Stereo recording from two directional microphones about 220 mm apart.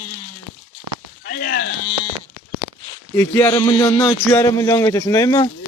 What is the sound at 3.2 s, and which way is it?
Speech, 15° left (ahead or behind).